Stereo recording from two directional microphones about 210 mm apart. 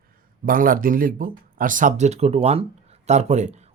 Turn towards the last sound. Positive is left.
turn(degrees=-35)  # may be behind; listen again after turning